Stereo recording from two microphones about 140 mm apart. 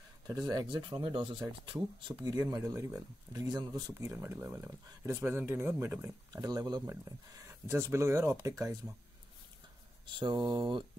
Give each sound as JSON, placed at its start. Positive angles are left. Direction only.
{"t": 0.3, "sound": "speech", "side_deg": -30}
{"t": 4.0, "sound": "speech", "side_deg": -15}
{"t": 10.0, "sound": "speech", "side_deg": -35}